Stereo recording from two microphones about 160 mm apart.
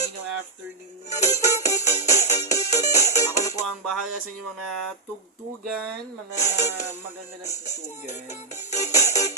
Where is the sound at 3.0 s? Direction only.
20° left (ahead or behind).